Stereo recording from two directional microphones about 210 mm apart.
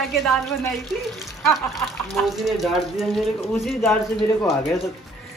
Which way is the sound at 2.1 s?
Centre (ahead or behind).